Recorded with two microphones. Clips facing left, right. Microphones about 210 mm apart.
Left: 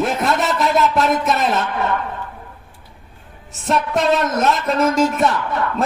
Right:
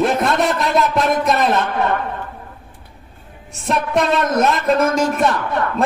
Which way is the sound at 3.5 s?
Centre (ahead or behind).